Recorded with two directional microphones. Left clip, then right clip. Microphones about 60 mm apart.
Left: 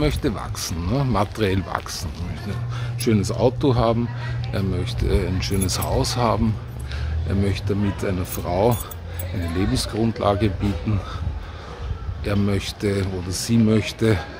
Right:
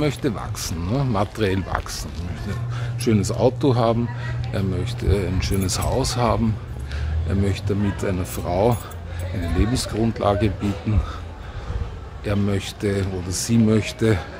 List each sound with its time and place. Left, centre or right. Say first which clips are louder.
0.0 s speech: even; left
0.8 s speech: left 1 dB; left
1.7 s speech: even; left
3.2 s speech: right 1 dB; centre
4.5 s speech: even; left
12.3 s speech: even; left
13.0 s speech: even; left